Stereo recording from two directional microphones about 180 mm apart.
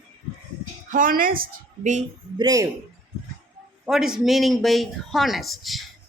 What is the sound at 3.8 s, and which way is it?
A man's voice, 5° right (ahead or behind).